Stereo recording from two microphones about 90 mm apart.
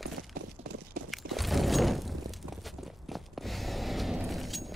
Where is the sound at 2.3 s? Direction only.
Centre (ahead or behind).